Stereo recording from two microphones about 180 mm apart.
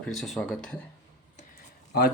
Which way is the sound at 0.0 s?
Centre (ahead or behind).